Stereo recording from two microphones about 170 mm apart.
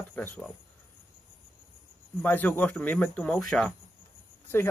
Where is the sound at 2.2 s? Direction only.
10° left (ahead or behind).